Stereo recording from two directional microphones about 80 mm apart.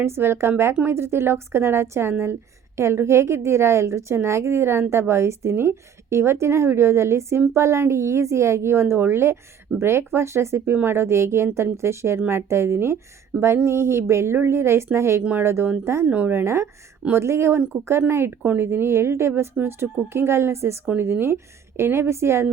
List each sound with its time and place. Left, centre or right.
0.0 s a woman's voice: right
13.3 s speech: centre
13.7 s a woman's voice: right
15.2 s speech: centre
15.4 s a woman's voice: right
16.0 s speech: centre
16.3 s a woman's voice: right